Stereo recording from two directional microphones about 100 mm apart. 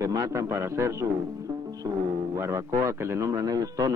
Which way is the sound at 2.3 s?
30° right (ahead or behind).